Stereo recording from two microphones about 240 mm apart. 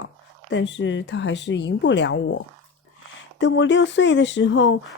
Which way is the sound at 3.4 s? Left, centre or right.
Left.